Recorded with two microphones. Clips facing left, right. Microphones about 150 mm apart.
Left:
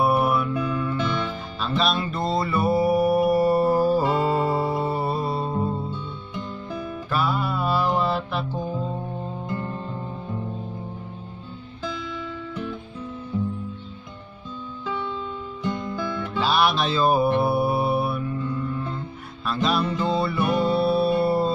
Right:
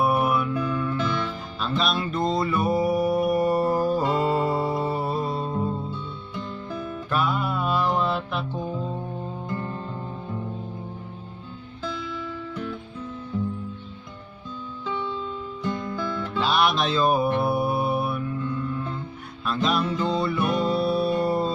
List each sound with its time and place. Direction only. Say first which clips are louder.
0.2 s music: left 1 dB; 5° left (ahead or behind)
1.6 s mantra: left 2 dB; centre (ahead or behind)
7.1 s music: even; centre (ahead or behind)
11.8 s music: even; 10° left (ahead or behind)
15.6 s music: left 1 dB; 15° left (ahead or behind)
16.3 s music: left 1 dB; 5° left (ahead or behind)
17.4 s mantra: left 2 dB; 5° left (ahead or behind)
19.4 s music: left 1 dB; centre (ahead or behind)